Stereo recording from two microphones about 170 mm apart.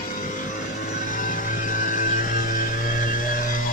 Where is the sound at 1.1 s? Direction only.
50° left (ahead or behind).